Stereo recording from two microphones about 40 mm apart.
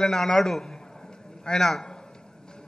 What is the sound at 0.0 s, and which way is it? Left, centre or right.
A man's voice, centre.